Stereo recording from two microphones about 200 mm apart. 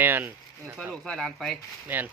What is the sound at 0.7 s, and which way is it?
Speech, centre (ahead or behind).